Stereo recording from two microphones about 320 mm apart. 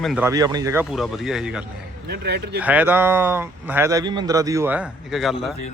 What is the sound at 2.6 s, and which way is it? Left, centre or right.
Speech, centre.